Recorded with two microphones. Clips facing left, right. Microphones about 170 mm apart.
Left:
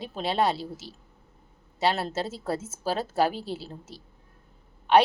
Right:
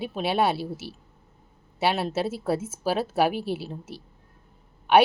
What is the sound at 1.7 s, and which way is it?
Speech, 10° right (ahead or behind).